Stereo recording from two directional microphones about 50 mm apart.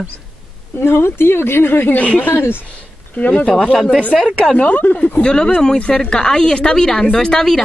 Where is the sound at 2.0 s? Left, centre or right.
Left.